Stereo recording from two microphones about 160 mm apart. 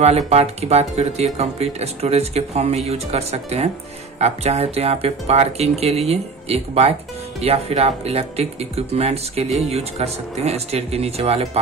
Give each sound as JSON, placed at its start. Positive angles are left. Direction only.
{"t": 0.3, "sound": "speech", "side_deg": -40}